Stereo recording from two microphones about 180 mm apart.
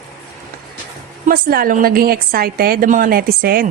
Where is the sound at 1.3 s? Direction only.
55° right (ahead or behind).